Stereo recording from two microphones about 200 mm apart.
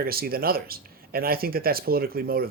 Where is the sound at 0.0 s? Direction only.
50° right (ahead or behind).